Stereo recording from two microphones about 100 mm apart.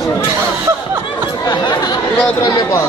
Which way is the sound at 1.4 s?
45° left (ahead or behind).